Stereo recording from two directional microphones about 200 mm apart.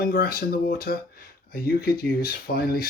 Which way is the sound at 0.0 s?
50° left (ahead or behind).